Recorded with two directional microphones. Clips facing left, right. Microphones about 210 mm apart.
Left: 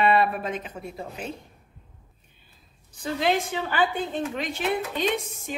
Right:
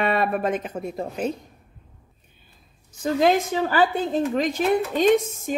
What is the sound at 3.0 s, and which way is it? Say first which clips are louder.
A woman's voice: right 5 dB; 45° right (ahead or behind).